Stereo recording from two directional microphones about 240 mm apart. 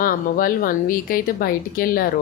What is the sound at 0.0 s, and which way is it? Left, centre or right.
Speech, left.